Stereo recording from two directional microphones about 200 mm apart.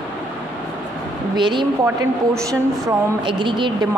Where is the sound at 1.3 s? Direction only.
25° right (ahead or behind).